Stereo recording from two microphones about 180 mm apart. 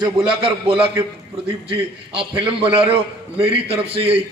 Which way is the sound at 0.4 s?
30° right (ahead or behind).